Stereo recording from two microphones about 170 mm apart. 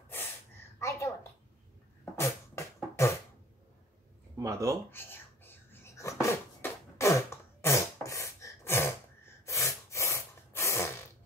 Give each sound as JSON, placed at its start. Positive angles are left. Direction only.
{"t": 0.7, "sound": "a sound", "side_deg": 15}
{"t": 2.1, "sound": "beatboxing", "side_deg": 15}
{"t": 4.4, "sound": "speech", "side_deg": -20}
{"t": 4.9, "sound": "whispering", "side_deg": 10}